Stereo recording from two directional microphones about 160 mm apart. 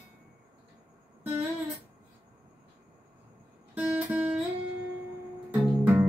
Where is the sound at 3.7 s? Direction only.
10° right (ahead or behind).